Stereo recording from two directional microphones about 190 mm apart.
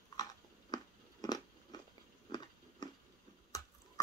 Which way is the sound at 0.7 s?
20° left (ahead or behind).